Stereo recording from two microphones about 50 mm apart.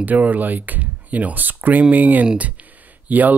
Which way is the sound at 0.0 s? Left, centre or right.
Right.